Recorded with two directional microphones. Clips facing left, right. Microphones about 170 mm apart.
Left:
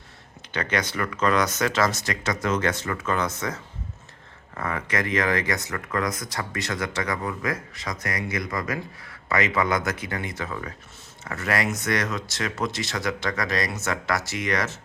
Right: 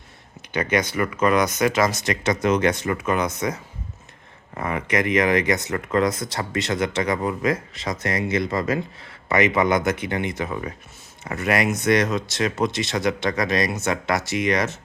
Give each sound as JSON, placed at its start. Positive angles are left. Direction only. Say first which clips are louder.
{"t": 0.5, "sound": "speech", "louder": "right 5 dB", "side_deg": -10}